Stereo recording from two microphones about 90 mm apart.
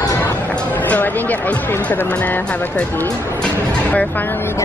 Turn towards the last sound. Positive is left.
turn(degrees=25)  # may be behind; listen again after turning